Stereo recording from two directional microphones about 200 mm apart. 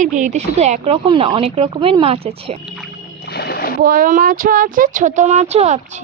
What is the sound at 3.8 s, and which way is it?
Speech, 45° right (ahead or behind).